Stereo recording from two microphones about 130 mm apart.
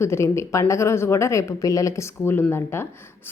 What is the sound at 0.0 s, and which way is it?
A woman's voice, 20° left (ahead or behind).